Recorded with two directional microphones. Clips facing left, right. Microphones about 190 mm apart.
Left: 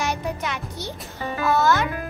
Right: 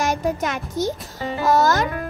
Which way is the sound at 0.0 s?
45° right (ahead or behind).